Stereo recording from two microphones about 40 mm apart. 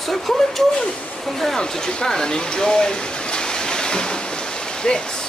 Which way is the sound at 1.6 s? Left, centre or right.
Centre.